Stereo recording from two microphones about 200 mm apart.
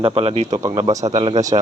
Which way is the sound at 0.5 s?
20° right (ahead or behind).